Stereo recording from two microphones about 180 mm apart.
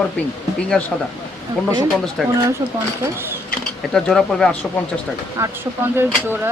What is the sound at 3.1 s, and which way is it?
Speech, 15° right (ahead or behind).